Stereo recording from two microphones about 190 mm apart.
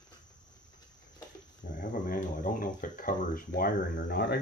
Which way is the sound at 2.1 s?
45° left (ahead or behind).